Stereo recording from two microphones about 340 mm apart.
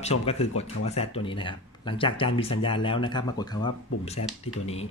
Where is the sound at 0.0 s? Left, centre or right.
Centre.